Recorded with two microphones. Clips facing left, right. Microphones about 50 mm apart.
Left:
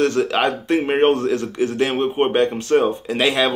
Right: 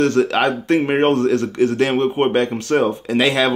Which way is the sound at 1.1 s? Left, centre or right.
Right.